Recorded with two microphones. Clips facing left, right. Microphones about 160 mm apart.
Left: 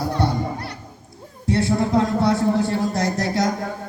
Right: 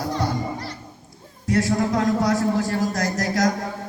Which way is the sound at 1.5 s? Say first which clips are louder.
Left 1 dB; 30° left (ahead or behind).